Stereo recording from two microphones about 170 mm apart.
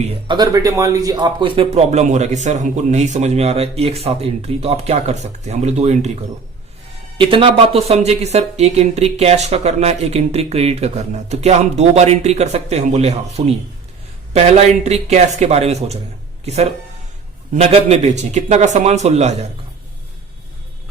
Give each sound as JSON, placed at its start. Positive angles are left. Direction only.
{"t": 0.3, "sound": "speech", "side_deg": -25}
{"t": 7.2, "sound": "speech", "side_deg": -30}
{"t": 17.5, "sound": "speech", "side_deg": -40}